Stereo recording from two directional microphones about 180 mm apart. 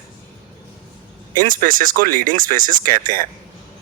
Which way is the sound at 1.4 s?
50° right (ahead or behind).